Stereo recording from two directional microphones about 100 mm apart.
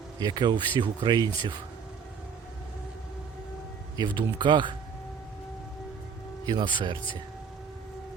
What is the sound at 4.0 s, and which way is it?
Speech, 50° right (ahead or behind).